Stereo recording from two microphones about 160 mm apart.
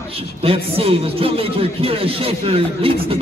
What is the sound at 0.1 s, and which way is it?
Speech, 35° right (ahead or behind).